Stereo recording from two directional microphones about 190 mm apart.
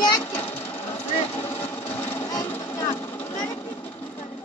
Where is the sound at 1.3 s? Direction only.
10° left (ahead or behind).